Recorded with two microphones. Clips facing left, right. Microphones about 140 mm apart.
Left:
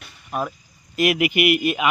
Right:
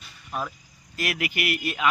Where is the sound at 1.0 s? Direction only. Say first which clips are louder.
Left 10 dB; 20° left (ahead or behind).